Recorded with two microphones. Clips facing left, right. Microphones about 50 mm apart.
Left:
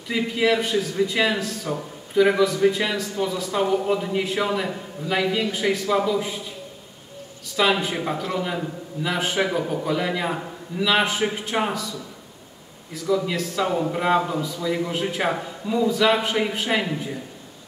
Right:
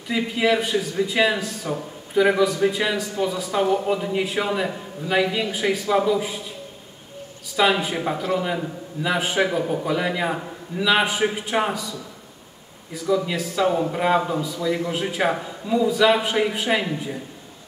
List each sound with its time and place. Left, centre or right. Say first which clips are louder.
0.1 s speech: even; centre
7.5 s speech: right 1 dB; centre
12.9 s a man's voice: right 1 dB; centre